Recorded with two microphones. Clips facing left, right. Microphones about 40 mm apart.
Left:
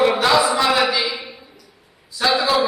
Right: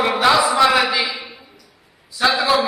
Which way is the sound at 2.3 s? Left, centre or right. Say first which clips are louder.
Right 1 dB; centre.